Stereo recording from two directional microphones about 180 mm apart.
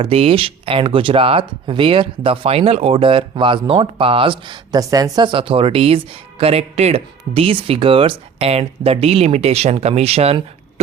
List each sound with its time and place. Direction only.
0.0 s speech: 30° right (ahead or behind)